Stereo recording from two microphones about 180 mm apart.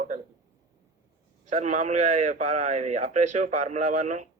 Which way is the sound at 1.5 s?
40° right (ahead or behind).